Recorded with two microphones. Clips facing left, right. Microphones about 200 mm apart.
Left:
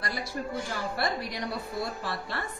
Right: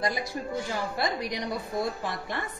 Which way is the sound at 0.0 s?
20° right (ahead or behind).